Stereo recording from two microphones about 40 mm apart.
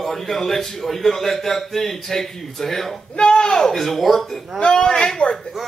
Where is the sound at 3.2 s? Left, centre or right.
Left; by 4.4 s centre.